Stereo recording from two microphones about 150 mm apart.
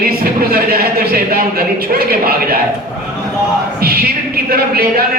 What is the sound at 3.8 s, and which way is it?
Speech, 90° right.